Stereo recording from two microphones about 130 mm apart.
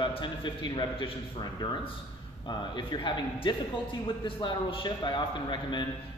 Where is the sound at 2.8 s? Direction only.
35° left (ahead or behind).